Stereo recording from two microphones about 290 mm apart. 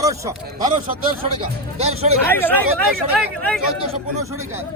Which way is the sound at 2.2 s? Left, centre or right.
Centre.